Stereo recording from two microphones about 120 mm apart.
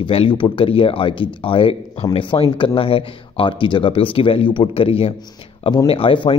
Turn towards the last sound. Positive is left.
turn(degrees=45)  # may be behind; listen again after turning